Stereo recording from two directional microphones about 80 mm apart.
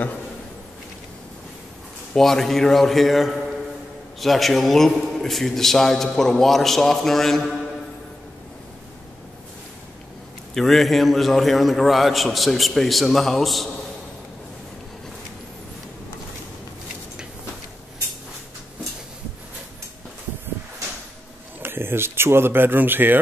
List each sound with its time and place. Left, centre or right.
2.1 s a man's voice: centre
10.5 s a man's voice: centre
21.6 s speech: right